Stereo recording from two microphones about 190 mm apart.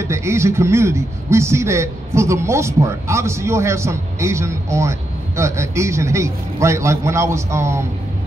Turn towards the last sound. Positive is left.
turn(degrees=-15)  # may be behind; listen again after turning